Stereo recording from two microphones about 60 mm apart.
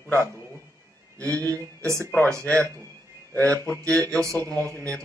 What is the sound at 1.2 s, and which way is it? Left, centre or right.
Speech, right.